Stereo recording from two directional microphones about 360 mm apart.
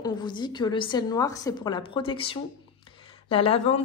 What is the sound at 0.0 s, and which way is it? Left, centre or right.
A woman's voice, centre.